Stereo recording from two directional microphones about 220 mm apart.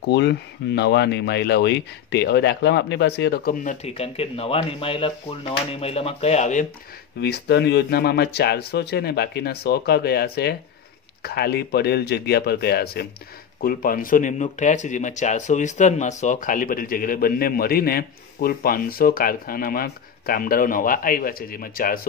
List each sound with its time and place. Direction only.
0.0 s speech: 50° left (ahead or behind)
3.6 s speech: 30° left (ahead or behind)
7.2 s speech: 50° left (ahead or behind)